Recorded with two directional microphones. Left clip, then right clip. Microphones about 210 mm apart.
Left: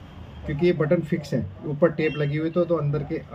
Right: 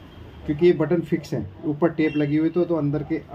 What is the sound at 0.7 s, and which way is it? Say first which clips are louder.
Speech: right 2 dB; 20° right (ahead or behind).